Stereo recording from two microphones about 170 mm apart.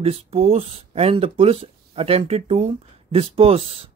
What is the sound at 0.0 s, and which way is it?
Speech, 35° right (ahead or behind).